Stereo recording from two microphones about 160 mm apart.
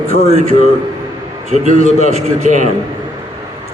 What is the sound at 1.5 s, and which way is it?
A man's voice, 50° right (ahead or behind).